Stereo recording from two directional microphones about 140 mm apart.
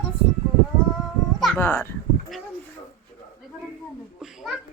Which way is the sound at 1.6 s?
15° left (ahead or behind).